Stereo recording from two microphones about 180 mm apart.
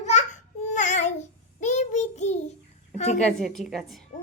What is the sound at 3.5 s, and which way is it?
Speech, centre (ahead or behind).